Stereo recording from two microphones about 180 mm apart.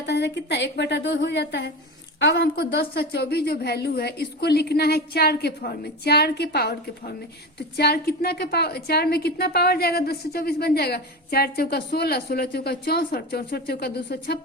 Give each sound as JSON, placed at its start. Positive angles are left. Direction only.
{"t": 0.0, "sound": "a woman's voice", "side_deg": 70}